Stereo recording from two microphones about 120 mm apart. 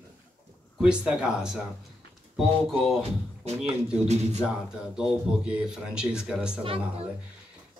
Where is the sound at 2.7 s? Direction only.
Centre (ahead or behind).